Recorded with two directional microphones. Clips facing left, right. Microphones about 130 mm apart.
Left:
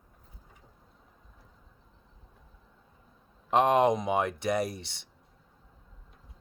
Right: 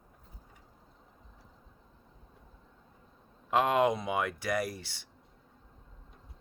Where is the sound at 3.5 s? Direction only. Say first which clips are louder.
Left 3 dB; 25° left (ahead or behind).